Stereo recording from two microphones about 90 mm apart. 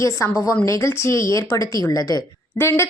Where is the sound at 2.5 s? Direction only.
30° left (ahead or behind).